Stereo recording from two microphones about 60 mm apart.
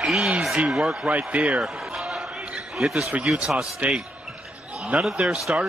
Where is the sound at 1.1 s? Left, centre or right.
Right.